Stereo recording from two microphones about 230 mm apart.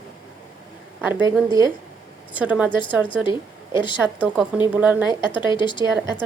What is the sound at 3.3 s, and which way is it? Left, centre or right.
Speech, left.